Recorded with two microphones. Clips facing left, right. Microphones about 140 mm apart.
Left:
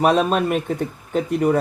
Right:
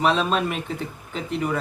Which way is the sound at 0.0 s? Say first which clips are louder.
Left 4 dB; 50° left (ahead or behind).